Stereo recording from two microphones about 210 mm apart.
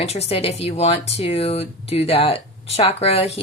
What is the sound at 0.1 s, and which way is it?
Speech, 30° left (ahead or behind).